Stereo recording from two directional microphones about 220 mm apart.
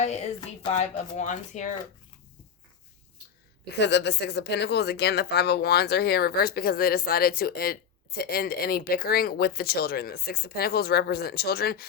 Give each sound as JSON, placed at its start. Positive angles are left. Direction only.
{"t": 0.0, "sound": "speech", "side_deg": 30}
{"t": 3.7, "sound": "a woman's voice", "side_deg": 50}